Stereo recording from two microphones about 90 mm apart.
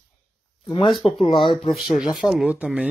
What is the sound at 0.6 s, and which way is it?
Speech, 70° left (ahead or behind).